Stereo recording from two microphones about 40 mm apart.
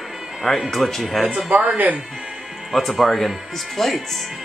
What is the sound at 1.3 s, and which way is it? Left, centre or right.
Speech, right.